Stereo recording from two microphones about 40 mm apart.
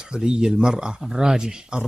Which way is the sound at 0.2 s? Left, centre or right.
Centre.